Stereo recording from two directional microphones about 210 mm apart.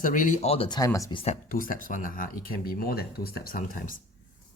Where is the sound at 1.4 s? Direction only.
40° left (ahead or behind).